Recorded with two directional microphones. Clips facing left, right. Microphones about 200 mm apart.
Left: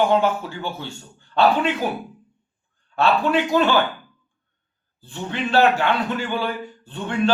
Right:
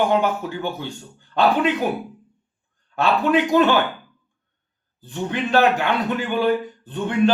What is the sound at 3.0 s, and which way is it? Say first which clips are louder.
Speech: right 1 dB; 15° right (ahead or behind).